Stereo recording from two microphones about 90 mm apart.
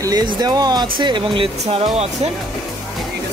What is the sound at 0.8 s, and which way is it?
Speech, 65° right (ahead or behind).